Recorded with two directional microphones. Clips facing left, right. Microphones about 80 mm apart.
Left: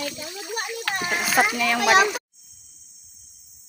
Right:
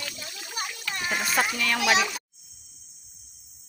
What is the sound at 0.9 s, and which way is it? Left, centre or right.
Speech, left.